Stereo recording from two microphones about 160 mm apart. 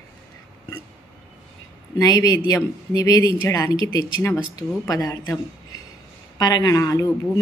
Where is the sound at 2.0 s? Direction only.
25° left (ahead or behind).